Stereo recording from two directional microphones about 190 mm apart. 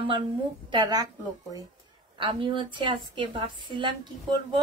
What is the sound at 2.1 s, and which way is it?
A woman's voice, 25° right (ahead or behind).